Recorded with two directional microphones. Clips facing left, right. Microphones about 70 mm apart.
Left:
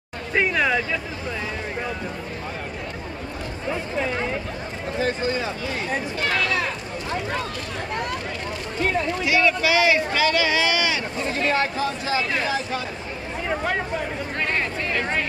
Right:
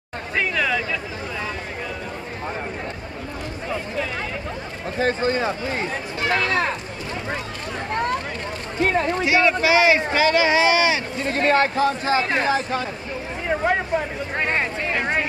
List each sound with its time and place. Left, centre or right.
0.3 s a sound: centre
5.0 s speech: right
6.2 s speech: right
8.8 s speech: right
11.2 s speech: right
14.3 s speech: right